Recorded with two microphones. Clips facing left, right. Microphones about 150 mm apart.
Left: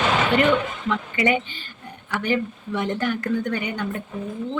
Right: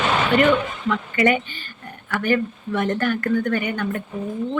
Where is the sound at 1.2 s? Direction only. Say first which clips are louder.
Right 2 dB; 15° left (ahead or behind).